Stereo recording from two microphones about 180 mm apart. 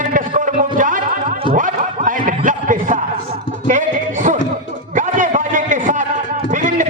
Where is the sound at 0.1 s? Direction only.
45° right (ahead or behind).